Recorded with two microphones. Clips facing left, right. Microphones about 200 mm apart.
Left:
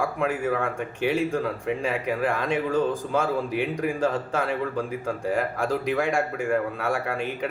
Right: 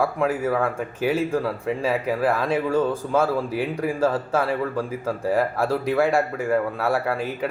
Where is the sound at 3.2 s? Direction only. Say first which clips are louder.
Right 2 dB; 35° right (ahead or behind).